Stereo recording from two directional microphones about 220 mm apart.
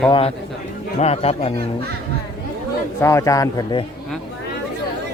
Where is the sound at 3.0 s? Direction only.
15° left (ahead or behind).